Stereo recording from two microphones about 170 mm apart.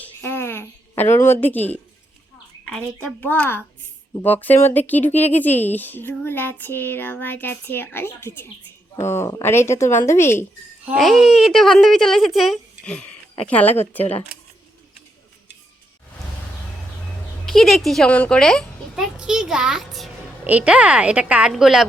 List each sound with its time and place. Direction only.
0.0 s a sound: 10° left (ahead or behind)
2.6 s child singing: 5° left (ahead or behind)
10.8 s a woman's voice: centre (ahead or behind)
13.4 s child singing: 10° left (ahead or behind)
14.0 s speech: 35° left (ahead or behind)
17.4 s a child's voice: centre (ahead or behind)